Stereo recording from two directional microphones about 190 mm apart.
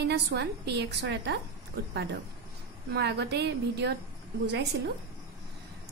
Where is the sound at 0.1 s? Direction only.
60° right (ahead or behind).